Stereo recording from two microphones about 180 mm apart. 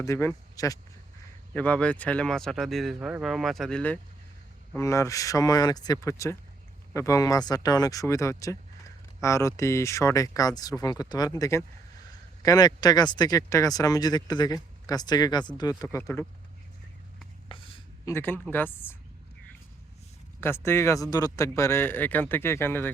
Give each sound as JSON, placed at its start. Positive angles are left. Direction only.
{"t": 0.0, "sound": "a man's voice", "side_deg": 15}
{"t": 1.5, "sound": "a man's voice", "side_deg": 10}
{"t": 17.5, "sound": "a sound", "side_deg": 30}
{"t": 18.1, "sound": "a man's voice", "side_deg": 10}
{"t": 20.4, "sound": "a man's voice", "side_deg": 15}